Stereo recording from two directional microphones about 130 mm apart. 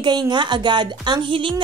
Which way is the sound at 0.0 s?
35° right (ahead or behind).